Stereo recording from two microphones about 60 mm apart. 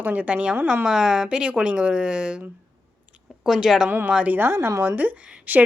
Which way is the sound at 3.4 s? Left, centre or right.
Centre.